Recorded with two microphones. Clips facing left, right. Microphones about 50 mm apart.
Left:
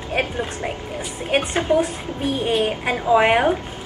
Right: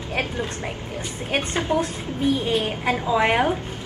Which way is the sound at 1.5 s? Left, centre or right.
Left.